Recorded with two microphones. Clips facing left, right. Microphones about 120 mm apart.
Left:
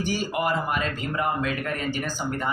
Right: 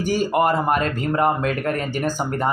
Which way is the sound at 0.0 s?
45° right (ahead or behind).